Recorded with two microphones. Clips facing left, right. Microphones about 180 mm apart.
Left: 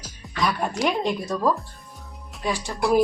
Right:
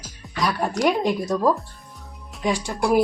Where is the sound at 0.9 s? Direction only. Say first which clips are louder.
Right 3 dB; 15° right (ahead or behind).